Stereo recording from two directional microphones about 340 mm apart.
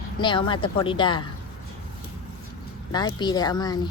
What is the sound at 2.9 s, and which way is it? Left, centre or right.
Speech, centre.